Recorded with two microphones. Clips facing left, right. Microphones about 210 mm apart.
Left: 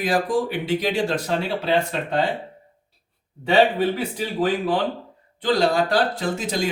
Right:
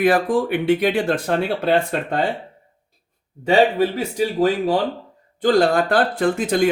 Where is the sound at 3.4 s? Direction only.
45° right (ahead or behind).